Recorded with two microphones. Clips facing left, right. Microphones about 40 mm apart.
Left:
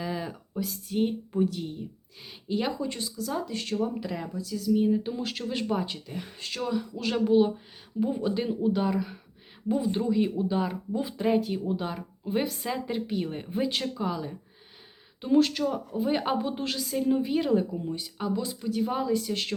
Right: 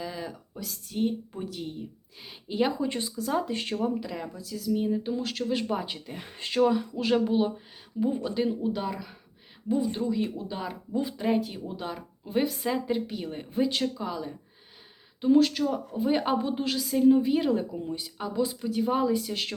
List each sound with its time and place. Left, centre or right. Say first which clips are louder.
0.0 s a sound: left 3 dB; centre
1.4 s a woman's voice: left 7 dB; centre
2.7 s speech: right 2 dB; right
4.0 s a woman's voice: left 2 dB; centre